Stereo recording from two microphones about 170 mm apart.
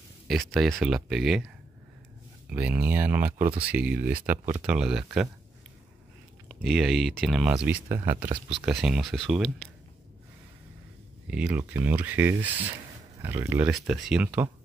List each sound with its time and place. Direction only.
0.3 s speech: centre (ahead or behind)
2.5 s speech: 10° right (ahead or behind)
6.5 s speech: centre (ahead or behind)
7.6 s speech: 10° right (ahead or behind)
8.3 s speech: 35° right (ahead or behind)
8.6 s speech: 5° right (ahead or behind)
11.2 s speech: 5° right (ahead or behind)